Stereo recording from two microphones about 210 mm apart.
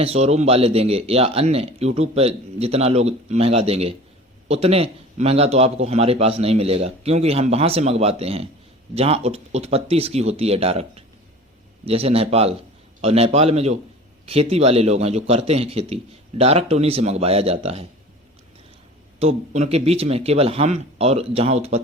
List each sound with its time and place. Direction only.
0.0 s a man's voice: 30° right (ahead or behind)
19.2 s a man's voice: 30° right (ahead or behind)